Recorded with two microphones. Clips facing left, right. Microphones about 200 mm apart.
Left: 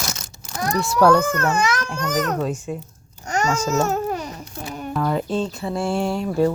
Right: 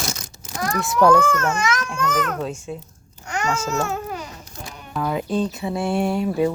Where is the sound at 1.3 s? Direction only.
35° left (ahead or behind).